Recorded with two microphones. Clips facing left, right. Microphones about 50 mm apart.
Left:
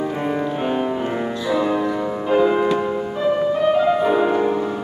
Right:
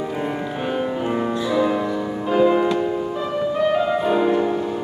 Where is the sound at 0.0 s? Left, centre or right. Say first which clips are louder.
Left 3 dB; centre.